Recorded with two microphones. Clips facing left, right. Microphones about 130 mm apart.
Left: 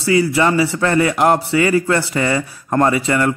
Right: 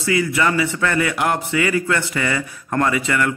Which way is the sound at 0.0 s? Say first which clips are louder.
Left 4 dB; 30° left (ahead or behind).